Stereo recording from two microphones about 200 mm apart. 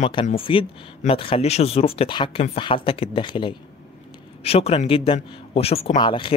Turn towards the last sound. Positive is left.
turn(degrees=25)  # may be behind; listen again after turning